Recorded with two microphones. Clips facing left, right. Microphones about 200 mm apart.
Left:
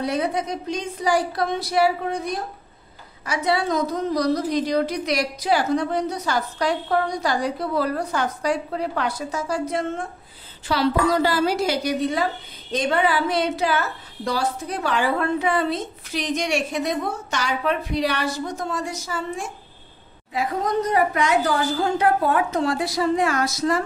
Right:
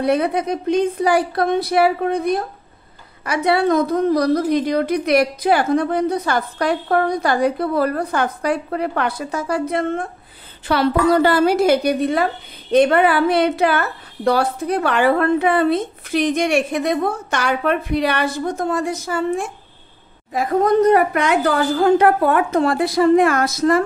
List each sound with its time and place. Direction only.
0.0 s a woman's voice: 60° right (ahead or behind)